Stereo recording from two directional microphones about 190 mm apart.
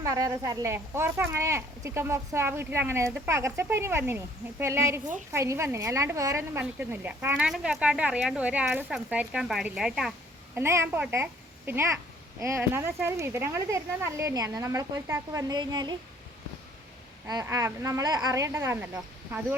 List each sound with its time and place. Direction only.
0.0 s a woman's voice: 20° right (ahead or behind); by 10.6 s centre (ahead or behind)
10.6 s a woman's voice: 15° right (ahead or behind)
17.2 s a woman's voice: 20° right (ahead or behind)